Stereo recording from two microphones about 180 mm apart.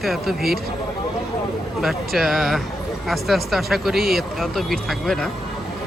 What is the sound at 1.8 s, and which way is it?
Speech, centre (ahead or behind).